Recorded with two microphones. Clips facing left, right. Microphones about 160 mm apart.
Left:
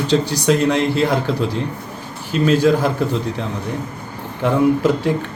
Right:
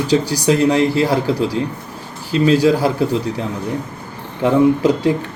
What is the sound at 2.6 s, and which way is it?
Speech, 10° right (ahead or behind).